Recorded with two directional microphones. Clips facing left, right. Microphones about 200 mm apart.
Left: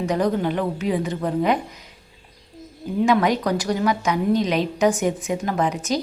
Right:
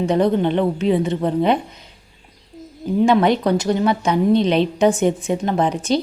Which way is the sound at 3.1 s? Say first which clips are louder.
Right 3 dB; 30° right (ahead or behind).